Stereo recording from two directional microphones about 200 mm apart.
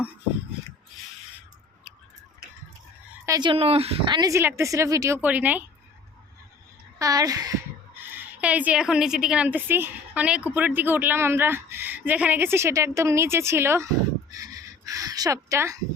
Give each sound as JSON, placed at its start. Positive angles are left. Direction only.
{"t": 3.2, "sound": "speech", "side_deg": -20}
{"t": 7.0, "sound": "a woman's voice", "side_deg": -20}